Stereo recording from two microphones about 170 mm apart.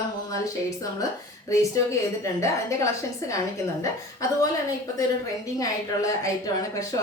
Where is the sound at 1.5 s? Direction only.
20° left (ahead or behind).